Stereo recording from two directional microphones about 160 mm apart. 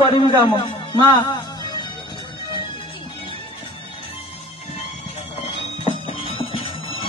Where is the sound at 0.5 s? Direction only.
30° left (ahead or behind).